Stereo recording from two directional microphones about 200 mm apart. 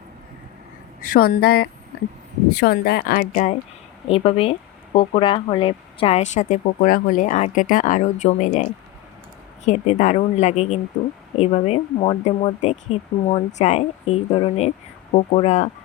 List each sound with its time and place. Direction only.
1.0 s a woman's voice: 45° left (ahead or behind)
9.6 s a woman's voice: 35° left (ahead or behind)